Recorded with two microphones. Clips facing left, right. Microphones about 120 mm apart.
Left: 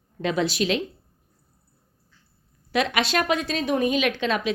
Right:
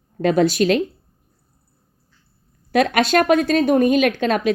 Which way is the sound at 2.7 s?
50° right (ahead or behind).